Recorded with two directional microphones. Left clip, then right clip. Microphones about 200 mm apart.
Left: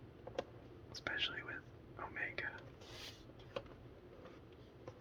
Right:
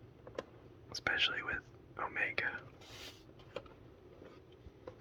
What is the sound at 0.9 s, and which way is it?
Whispering, 35° right (ahead or behind).